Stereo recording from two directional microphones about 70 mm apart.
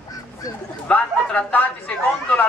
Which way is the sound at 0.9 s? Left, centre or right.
Left.